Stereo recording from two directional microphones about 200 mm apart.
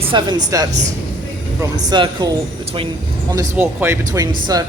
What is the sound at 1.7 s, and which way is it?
Speech, 20° right (ahead or behind).